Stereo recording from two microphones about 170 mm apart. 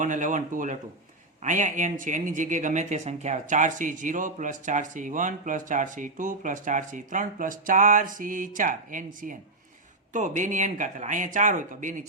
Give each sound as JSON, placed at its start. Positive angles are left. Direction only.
{"t": 0.0, "sound": "speech", "side_deg": -50}